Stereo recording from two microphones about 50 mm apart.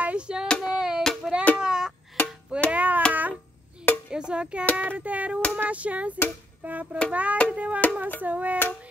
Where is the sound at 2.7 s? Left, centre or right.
Right.